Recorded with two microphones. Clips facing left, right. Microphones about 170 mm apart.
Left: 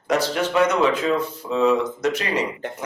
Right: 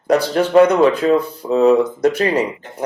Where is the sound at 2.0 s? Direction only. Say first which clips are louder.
Right 7 dB; 55° right (ahead or behind).